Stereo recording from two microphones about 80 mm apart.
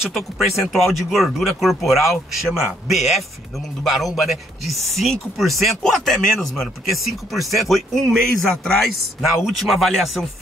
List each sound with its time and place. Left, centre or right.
0.0 s a man's voice: centre